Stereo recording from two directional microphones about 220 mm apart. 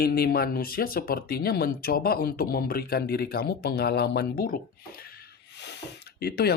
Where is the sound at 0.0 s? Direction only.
45° left (ahead or behind).